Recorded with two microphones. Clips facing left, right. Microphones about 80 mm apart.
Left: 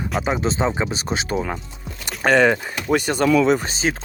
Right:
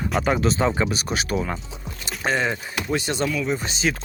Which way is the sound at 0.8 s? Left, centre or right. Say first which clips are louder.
Left 1 dB; left.